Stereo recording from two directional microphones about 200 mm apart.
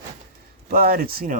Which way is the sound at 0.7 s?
50° right (ahead or behind).